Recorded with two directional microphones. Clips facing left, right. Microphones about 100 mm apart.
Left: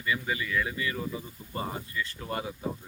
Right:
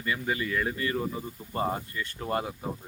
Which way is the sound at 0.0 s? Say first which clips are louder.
Right 1 dB; 40° right (ahead or behind).